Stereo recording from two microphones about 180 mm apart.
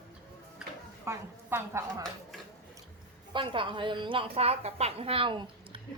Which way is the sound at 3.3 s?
25° right (ahead or behind).